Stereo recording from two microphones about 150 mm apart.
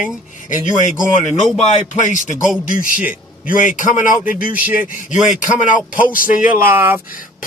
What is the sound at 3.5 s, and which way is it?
Speech, 60° left (ahead or behind).